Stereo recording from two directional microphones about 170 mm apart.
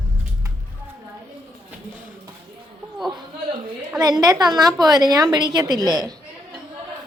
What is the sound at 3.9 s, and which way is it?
A woman's voice, 20° right (ahead or behind).